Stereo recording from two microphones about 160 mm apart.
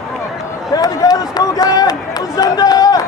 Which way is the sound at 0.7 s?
25° left (ahead or behind).